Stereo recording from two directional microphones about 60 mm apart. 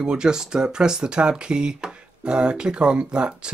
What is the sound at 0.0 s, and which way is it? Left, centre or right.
Speech, centre.